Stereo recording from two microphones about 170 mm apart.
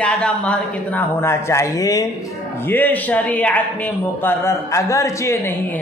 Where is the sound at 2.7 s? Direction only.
10° left (ahead or behind).